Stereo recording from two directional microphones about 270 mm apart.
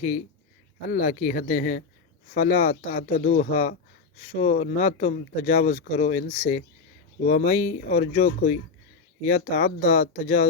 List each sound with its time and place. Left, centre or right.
0.9 s speech: left